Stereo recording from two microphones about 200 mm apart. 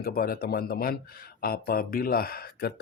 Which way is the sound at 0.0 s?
45° left (ahead or behind).